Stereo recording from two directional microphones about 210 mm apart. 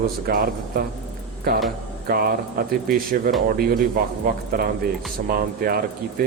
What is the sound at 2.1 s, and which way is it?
Speech, 45° right (ahead or behind).